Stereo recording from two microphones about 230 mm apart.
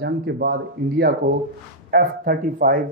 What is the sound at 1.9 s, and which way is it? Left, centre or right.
Speech, right.